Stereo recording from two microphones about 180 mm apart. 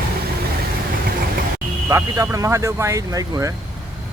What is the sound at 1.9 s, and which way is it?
Speech, 20° right (ahead or behind).